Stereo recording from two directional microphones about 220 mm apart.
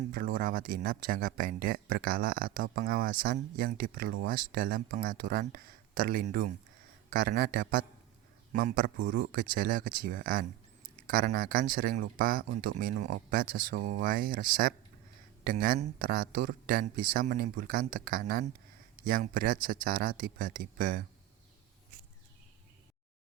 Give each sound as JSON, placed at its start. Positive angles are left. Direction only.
{"t": 0.0, "sound": "speech", "side_deg": -40}